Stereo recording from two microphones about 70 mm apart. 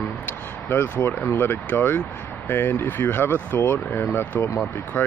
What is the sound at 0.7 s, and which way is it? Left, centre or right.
Speech, left.